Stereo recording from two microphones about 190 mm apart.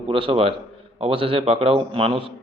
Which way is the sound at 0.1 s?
30° right (ahead or behind).